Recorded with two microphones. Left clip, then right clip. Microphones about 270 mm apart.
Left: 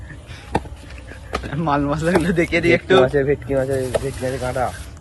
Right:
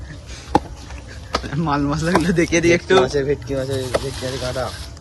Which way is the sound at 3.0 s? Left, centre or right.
Centre.